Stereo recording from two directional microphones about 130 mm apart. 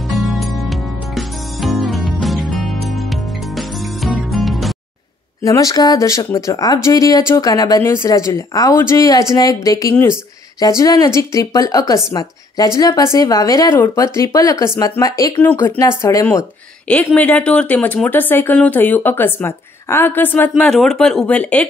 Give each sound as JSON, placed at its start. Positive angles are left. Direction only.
{"t": 0.1, "sound": "music", "side_deg": 0}
{"t": 5.4, "sound": "a woman's voice", "side_deg": 25}
{"t": 16.3, "sound": "speech", "side_deg": 10}